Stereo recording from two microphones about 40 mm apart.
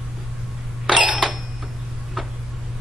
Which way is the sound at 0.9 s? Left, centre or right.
Centre.